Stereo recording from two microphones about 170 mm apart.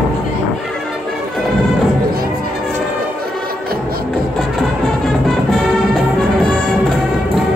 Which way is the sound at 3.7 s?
60° right (ahead or behind).